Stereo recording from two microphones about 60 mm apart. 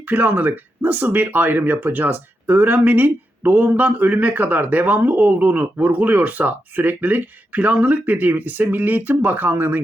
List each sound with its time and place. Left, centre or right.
0.0 s speech: right